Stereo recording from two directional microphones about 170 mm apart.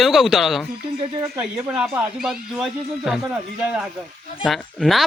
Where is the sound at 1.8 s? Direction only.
5° right (ahead or behind).